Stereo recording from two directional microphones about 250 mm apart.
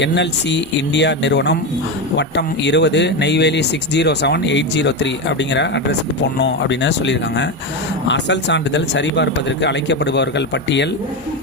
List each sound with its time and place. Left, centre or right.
0.0 s speech: left